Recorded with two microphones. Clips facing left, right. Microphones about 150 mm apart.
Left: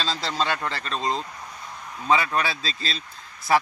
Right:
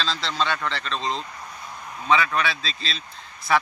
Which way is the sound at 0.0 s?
40° left (ahead or behind).